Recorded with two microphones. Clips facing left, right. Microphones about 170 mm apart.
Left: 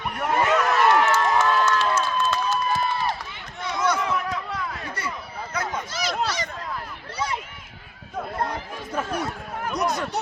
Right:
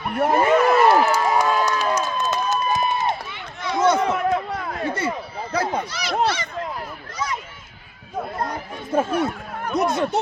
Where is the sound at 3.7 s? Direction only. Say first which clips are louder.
Right 6 dB; 25° right (ahead or behind).